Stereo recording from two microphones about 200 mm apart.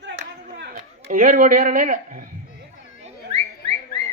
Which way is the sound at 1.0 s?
40° right (ahead or behind).